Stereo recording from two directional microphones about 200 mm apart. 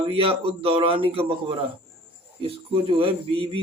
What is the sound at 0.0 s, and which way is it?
Speech, 25° right (ahead or behind).